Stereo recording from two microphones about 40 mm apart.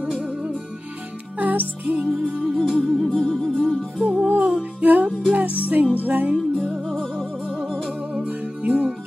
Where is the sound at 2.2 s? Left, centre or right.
Centre.